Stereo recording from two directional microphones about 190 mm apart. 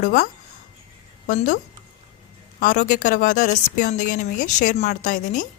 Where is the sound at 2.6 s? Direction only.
45° left (ahead or behind).